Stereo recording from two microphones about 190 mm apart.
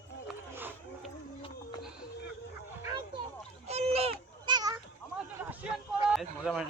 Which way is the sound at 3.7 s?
35° right (ahead or behind).